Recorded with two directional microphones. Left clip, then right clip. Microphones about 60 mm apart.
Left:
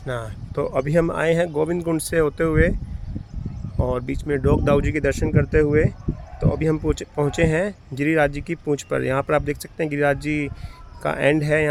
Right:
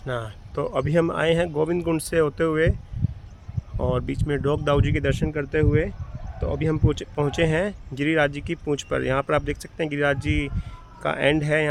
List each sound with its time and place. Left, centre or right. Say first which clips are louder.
0.0 s speech: left 1 dB; left
3.8 s speech: left 1 dB; left
4.9 s speech: left 3 dB; left
6.4 s speech: left 4 dB; left
6.8 s speech: left 2 dB; left